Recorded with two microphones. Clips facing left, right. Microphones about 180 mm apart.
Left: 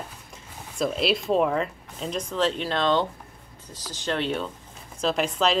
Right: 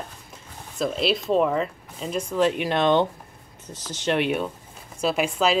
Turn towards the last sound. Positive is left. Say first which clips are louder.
# right 1 dB
turn(degrees=-5)  # may be behind; listen again after turning